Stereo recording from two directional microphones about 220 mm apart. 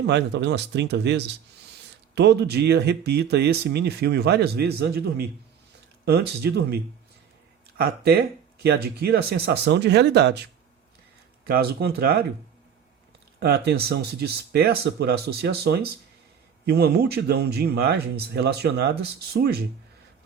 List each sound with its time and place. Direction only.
0.0 s speech: 50° right (ahead or behind)
7.8 s speech: 45° right (ahead or behind)
13.4 s speech: 45° right (ahead or behind)